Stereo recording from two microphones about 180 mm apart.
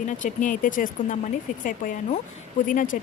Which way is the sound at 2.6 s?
50° left (ahead or behind).